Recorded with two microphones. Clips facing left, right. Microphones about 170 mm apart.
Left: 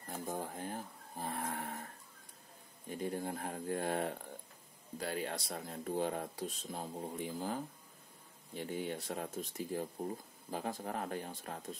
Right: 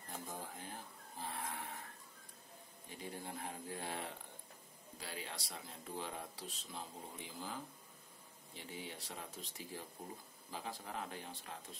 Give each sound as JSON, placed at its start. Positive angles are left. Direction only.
{"t": 0.3, "sound": "livestock", "side_deg": 50}
{"t": 2.9, "sound": "speech", "side_deg": 50}